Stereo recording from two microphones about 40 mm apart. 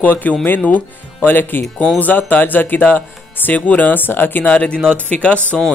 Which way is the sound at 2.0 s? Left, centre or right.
Left.